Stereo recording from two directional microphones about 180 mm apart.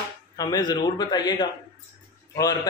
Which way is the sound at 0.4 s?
20° left (ahead or behind).